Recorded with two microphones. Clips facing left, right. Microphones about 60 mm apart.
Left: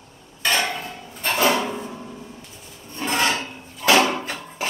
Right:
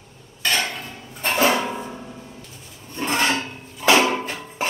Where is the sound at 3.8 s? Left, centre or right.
Centre.